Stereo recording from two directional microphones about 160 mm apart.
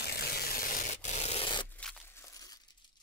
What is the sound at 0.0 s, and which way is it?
Rub, 80° left.